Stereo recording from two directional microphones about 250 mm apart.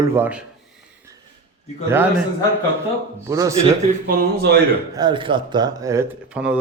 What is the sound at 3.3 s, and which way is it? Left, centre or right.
Speech, centre.